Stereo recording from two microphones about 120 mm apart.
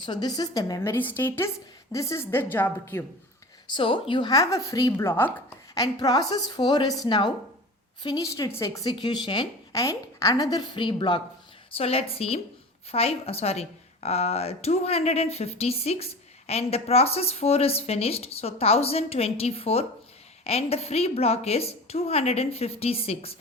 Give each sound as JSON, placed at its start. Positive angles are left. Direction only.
{"t": 0.0, "sound": "a woman's voice", "side_deg": 40}
{"t": 0.8, "sound": "a woman's voice", "side_deg": 15}
{"t": 3.7, "sound": "a woman's voice", "side_deg": 45}
{"t": 4.3, "sound": "a woman's voice", "side_deg": 30}
{"t": 5.7, "sound": "a woman's voice", "side_deg": 30}
{"t": 8.9, "sound": "a woman's voice", "side_deg": 40}
{"t": 9.7, "sound": "a woman's voice", "side_deg": 25}
{"t": 11.7, "sound": "speech", "side_deg": 55}